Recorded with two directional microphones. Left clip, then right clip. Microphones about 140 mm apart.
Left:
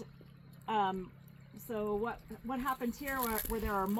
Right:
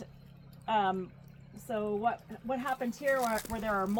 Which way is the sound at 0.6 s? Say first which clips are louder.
Right 4 dB; 35° right (ahead or behind).